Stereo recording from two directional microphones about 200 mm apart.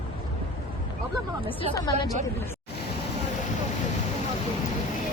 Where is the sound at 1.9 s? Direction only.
35° right (ahead or behind).